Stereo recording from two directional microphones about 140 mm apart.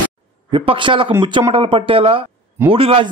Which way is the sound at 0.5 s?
35° right (ahead or behind).